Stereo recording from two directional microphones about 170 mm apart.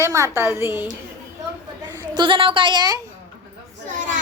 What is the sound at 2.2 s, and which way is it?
Speech, 30° right (ahead or behind).